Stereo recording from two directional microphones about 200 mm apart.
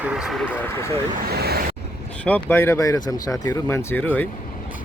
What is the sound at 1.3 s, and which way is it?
Vehicle, 50° right (ahead or behind).